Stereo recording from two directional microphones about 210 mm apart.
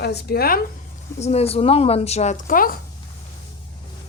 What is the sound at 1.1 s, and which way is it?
A woman's voice, 30° left (ahead or behind).